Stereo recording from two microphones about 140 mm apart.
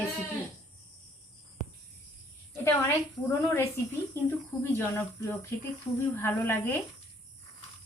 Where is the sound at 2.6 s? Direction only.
20° left (ahead or behind).